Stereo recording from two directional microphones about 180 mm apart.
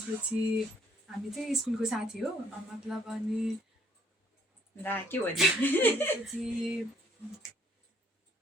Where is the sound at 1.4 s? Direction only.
Centre (ahead or behind).